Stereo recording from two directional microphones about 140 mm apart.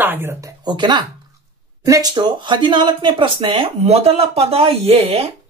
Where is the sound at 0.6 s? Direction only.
30° right (ahead or behind).